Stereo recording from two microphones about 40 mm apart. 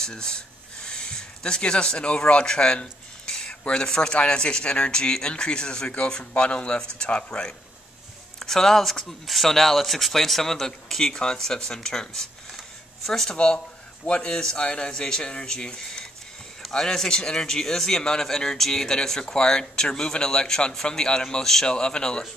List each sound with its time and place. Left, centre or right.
0.0 s a man's voice: centre
8.4 s a man's voice: centre
14.0 s a man's voice: left